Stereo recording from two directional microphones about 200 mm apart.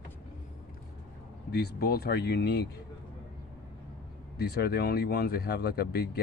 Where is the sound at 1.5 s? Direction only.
55° left (ahead or behind).